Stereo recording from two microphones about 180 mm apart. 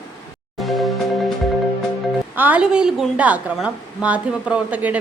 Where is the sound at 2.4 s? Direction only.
10° right (ahead or behind).